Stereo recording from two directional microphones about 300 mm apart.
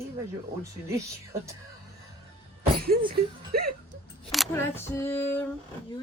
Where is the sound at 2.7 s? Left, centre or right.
Right.